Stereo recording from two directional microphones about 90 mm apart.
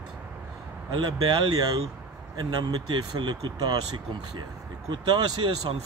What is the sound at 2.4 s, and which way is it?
Speech, 55° right (ahead or behind).